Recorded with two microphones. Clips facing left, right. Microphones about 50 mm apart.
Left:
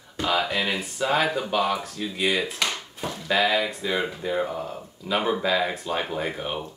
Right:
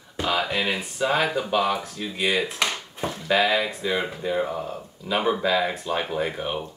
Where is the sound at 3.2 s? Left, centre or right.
Centre.